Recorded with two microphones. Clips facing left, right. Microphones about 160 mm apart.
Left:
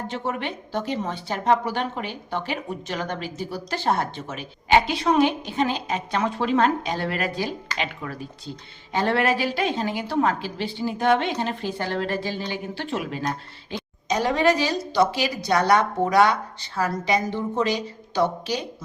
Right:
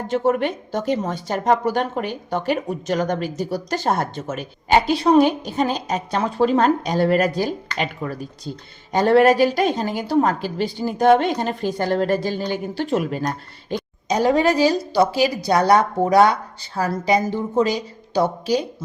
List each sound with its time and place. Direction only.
0.1 s a woman's voice: 45° right (ahead or behind)